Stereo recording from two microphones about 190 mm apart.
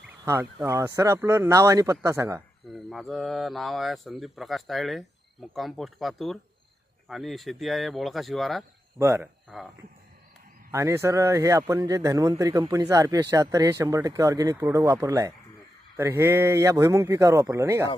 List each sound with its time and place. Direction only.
0.3 s a man's voice: 15° right (ahead or behind)
2.6 s speech: centre (ahead or behind)
9.0 s a man's voice: 15° right (ahead or behind)
10.7 s a man's voice: 15° right (ahead or behind)